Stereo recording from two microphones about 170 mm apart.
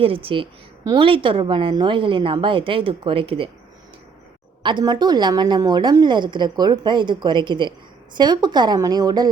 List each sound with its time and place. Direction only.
0.0 s a woman's voice: 30° right (ahead or behind)
4.6 s a woman's voice: 25° right (ahead or behind)